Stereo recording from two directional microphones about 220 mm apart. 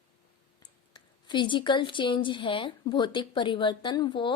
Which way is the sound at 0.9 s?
20° left (ahead or behind).